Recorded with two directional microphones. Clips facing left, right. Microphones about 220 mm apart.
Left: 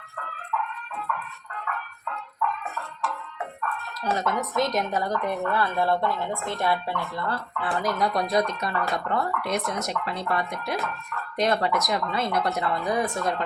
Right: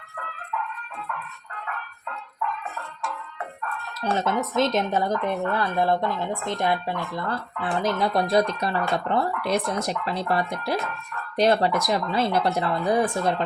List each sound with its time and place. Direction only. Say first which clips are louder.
4.0 s a woman's voice: right 2 dB; 25° right (ahead or behind)